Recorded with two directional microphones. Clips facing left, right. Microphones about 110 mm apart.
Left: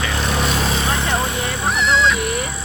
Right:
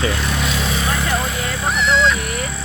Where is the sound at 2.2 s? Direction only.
20° left (ahead or behind).